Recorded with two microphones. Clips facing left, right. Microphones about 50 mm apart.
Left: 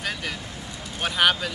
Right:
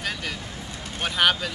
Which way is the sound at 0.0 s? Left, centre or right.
Centre.